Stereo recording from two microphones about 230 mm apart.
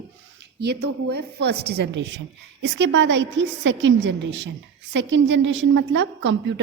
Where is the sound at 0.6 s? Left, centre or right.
Right.